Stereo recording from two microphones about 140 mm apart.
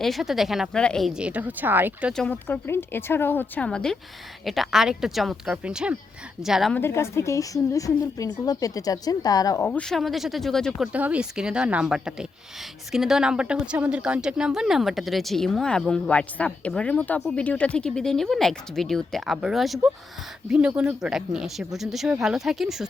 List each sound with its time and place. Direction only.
0.0 s speech: centre (ahead or behind)
2.1 s speech: 10° left (ahead or behind)
6.7 s a woman's voice: 20° left (ahead or behind)
9.6 s speech: 5° left (ahead or behind)
10.9 s speech: 10° right (ahead or behind)